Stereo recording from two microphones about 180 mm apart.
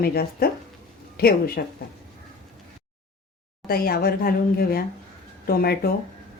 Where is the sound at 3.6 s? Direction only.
55° left (ahead or behind).